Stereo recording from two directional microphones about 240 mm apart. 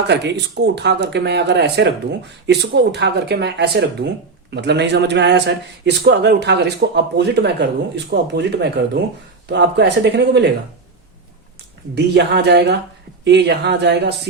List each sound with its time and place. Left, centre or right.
0.1 s a man's voice: right
11.9 s a man's voice: right